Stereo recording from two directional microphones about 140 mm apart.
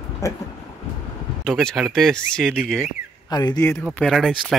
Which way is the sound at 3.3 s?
30° left (ahead or behind).